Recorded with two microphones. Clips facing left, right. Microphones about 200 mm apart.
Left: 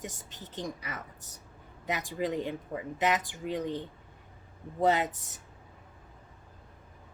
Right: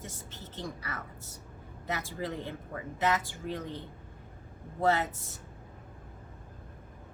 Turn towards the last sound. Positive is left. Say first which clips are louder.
# left 1 dB
turn(degrees=15)  # may be behind; listen again after turning